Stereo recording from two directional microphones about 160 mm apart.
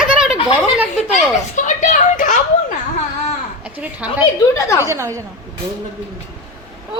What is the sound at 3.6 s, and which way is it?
Speech, 10° right (ahead or behind).